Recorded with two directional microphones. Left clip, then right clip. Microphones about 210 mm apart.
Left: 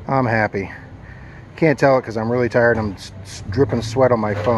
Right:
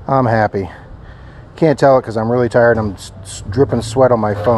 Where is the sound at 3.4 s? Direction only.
20° right (ahead or behind).